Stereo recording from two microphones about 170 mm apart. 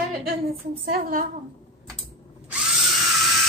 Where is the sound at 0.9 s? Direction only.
55° right (ahead or behind).